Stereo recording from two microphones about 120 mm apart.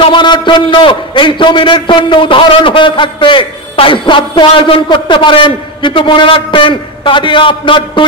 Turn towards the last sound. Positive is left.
turn(degrees=45)  # may be behind; listen again after turning